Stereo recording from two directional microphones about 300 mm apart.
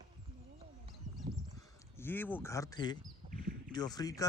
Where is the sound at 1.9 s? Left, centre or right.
Centre.